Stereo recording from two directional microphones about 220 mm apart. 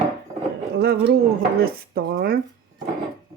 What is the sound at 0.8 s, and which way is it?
Speech, 45° right (ahead or behind).